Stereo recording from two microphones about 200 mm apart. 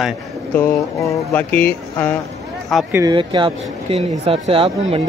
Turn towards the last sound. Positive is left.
turn(degrees=-25)  # may be behind; listen again after turning